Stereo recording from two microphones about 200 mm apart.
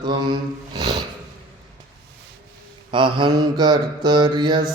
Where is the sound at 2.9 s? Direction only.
25° right (ahead or behind).